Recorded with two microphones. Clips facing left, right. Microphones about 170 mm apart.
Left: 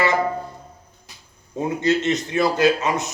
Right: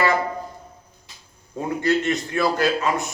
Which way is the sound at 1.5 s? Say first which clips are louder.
Left 1 dB; 20° left (ahead or behind).